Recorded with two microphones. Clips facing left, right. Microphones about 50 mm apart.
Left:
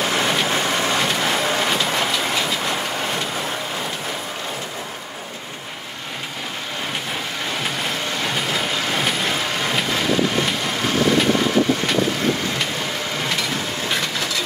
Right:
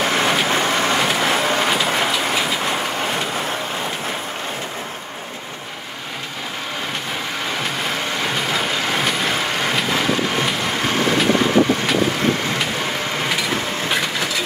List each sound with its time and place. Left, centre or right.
0.0 s vehicle: right
0.9 s vehicle: right
2.0 s train: centre
7.6 s vehicle: centre
13.8 s wood: centre